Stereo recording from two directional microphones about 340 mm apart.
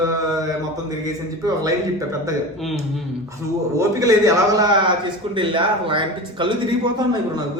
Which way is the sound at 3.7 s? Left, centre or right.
Centre.